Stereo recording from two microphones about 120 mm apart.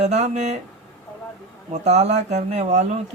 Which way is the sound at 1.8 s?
65° right (ahead or behind).